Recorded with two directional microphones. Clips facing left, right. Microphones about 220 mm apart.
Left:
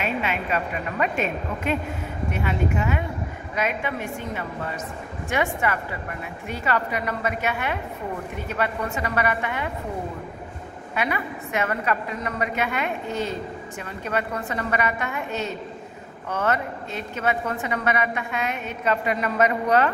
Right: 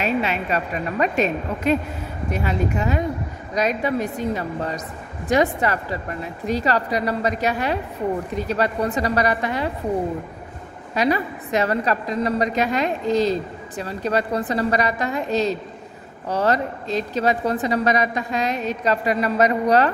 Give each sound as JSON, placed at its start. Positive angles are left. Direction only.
{"t": 0.0, "sound": "a woman's voice", "side_deg": -40}
{"t": 11.0, "sound": "a woman's voice", "side_deg": -35}